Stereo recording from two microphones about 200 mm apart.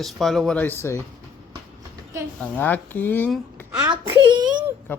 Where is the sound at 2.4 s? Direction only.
10° left (ahead or behind).